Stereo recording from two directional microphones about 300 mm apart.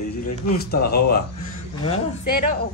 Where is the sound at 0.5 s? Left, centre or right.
Left.